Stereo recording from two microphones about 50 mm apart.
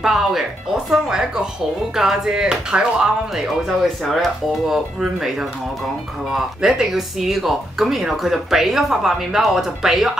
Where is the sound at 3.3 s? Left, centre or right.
Centre.